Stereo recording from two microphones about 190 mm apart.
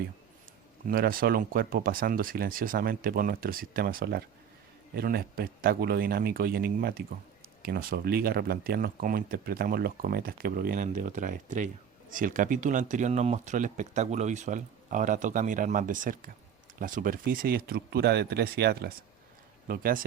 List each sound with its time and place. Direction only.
0.9 s speech: 50° right (ahead or behind)